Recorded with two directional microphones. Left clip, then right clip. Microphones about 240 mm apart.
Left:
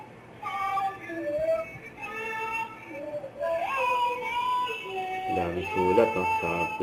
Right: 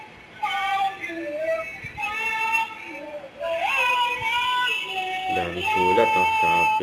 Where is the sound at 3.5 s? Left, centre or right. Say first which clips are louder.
Right 6 dB; centre.